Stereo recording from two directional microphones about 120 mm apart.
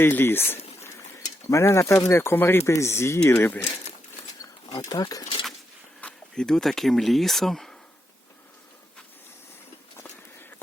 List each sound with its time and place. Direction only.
0.0 s speech: 20° left (ahead or behind)
4.9 s speech: 30° left (ahead or behind)
6.0 s speech: 10° left (ahead or behind)